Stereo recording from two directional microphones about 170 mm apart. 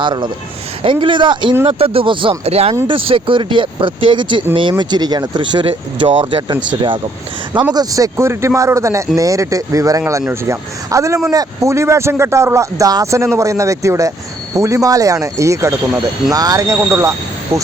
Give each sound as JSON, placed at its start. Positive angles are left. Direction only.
{"t": 0.0, "sound": "speech", "side_deg": -25}
{"t": 7.7, "sound": "a man's voice", "side_deg": -20}